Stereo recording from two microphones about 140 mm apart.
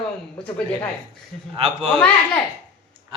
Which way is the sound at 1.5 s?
45° right (ahead or behind).